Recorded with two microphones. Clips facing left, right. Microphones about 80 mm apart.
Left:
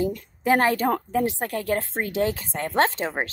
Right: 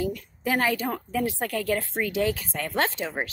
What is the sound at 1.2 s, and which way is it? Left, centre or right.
Speech, left.